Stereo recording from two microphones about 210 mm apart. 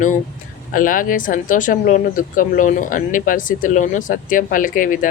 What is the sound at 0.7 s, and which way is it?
Speech, 40° left (ahead or behind).